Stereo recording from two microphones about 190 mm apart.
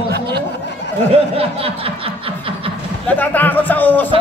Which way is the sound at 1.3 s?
30° right (ahead or behind).